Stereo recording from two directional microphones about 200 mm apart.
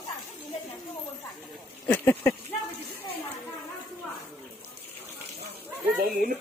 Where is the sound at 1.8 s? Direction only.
5° left (ahead or behind).